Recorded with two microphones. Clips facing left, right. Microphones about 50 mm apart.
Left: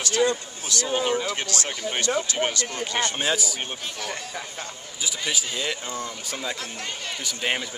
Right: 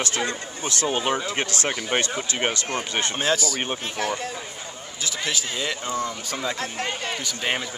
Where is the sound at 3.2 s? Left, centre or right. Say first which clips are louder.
Right 2 dB; centre.